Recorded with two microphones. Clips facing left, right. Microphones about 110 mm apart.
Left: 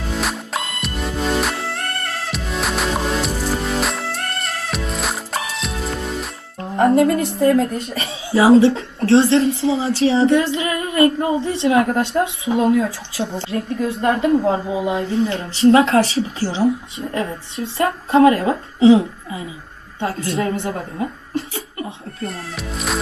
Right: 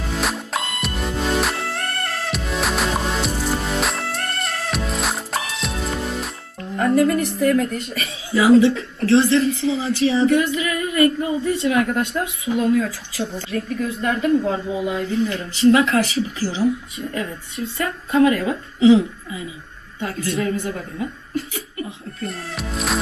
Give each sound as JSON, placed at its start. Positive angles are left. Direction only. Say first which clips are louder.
{"t": 0.2, "sound": "music", "louder": "right 1 dB", "side_deg": 0}
{"t": 6.7, "sound": "a woman's voice", "louder": "left 3 dB", "side_deg": 25}
{"t": 22.3, "sound": "speech", "louder": "even", "side_deg": 0}